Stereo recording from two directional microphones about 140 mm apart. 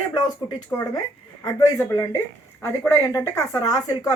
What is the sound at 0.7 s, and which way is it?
A woman's voice, 15° left (ahead or behind).